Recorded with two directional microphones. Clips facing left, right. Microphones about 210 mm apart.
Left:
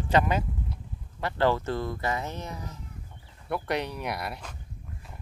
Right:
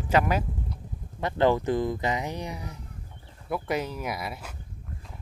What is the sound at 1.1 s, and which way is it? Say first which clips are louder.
Speech: right 2 dB; 20° right (ahead or behind).